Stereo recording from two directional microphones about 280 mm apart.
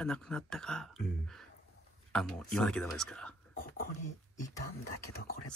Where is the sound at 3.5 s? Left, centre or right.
Left.